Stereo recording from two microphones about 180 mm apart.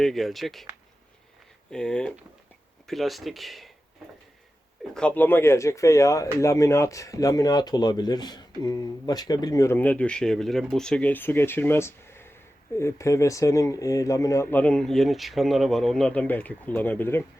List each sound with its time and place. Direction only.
0.0 s speech: centre (ahead or behind)
1.7 s speech: 5° left (ahead or behind)
4.9 s speech: 10° left (ahead or behind)